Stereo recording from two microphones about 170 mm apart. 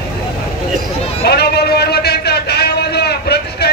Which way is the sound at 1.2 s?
70° left (ahead or behind).